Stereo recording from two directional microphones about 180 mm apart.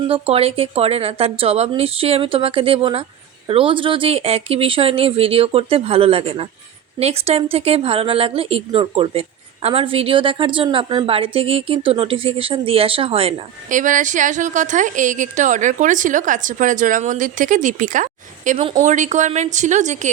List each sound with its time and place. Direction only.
0.1 s speech: 35° right (ahead or behind)
13.7 s a woman's voice: 45° right (ahead or behind)